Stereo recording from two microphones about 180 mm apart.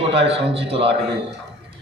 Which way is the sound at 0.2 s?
30° right (ahead or behind).